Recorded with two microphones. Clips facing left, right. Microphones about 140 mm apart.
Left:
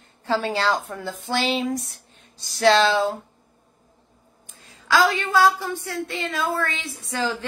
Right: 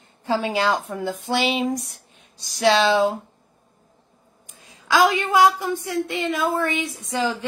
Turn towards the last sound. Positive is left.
turn(degrees=-15)  # may be behind; listen again after turning